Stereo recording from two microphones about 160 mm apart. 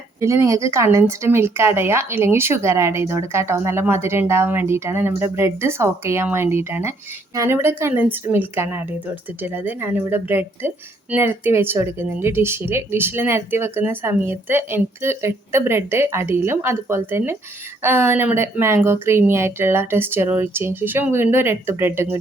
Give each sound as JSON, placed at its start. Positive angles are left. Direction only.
{"t": 0.2, "sound": "speech", "side_deg": -20}